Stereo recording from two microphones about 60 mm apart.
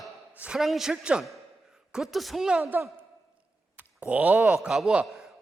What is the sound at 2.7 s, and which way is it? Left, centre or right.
Speech, right.